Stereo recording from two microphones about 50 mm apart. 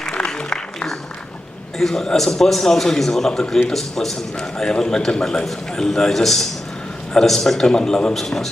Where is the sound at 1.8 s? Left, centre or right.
Centre.